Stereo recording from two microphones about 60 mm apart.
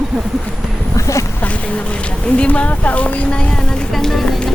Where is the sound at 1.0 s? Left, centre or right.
Left.